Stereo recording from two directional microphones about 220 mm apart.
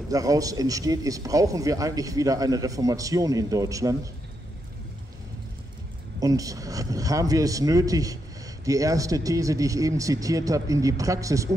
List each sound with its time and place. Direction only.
0.1 s speech: 15° right (ahead or behind)
6.1 s speech: 15° right (ahead or behind)